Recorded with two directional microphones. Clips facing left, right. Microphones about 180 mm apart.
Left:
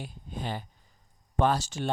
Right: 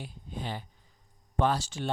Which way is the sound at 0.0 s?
45° left (ahead or behind).